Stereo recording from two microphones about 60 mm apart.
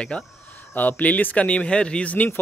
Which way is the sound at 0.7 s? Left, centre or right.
Left.